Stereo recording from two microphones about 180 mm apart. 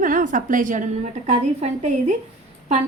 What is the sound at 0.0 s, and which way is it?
A woman's voice, 50° right (ahead or behind).